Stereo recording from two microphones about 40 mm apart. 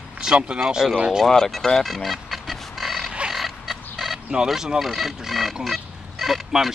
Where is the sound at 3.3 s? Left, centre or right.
Centre.